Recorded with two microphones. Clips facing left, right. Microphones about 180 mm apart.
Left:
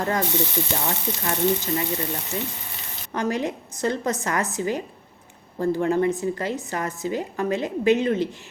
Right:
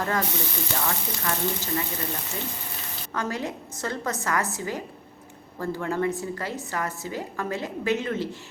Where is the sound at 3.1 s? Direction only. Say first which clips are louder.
Left 5 dB; 20° left (ahead or behind).